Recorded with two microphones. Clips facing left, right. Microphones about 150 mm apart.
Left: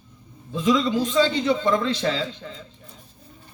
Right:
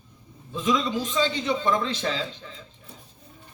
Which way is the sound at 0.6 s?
45° left (ahead or behind).